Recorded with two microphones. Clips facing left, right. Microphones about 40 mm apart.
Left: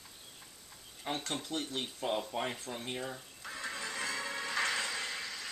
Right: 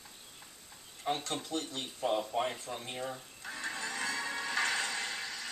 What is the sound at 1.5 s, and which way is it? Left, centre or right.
Speech, left.